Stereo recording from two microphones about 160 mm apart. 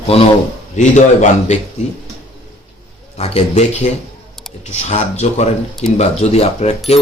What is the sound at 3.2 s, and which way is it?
Speech, 40° left (ahead or behind).